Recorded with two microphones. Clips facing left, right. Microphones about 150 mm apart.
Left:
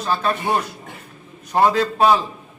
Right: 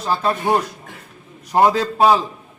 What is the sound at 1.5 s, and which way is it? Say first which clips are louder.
Speech: right 1 dB; 15° right (ahead or behind).